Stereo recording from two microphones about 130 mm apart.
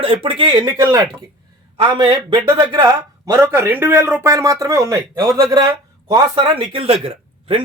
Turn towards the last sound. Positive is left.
turn(degrees=-45)  # may be behind; listen again after turning